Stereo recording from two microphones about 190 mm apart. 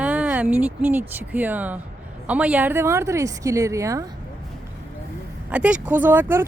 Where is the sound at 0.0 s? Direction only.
10° right (ahead or behind).